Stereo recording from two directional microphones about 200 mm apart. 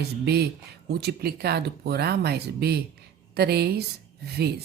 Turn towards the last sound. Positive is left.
turn(degrees=-55)  # may be behind; listen again after turning